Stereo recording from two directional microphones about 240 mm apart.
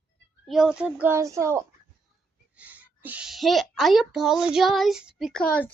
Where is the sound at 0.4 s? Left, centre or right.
Centre.